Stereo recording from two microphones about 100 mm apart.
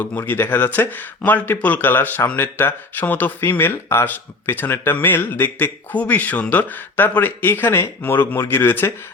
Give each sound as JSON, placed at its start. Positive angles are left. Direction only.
{"t": 0.0, "sound": "speech", "side_deg": 20}